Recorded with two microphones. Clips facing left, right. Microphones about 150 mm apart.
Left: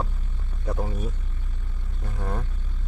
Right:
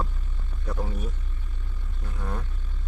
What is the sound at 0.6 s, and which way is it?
Speech, 25° left (ahead or behind).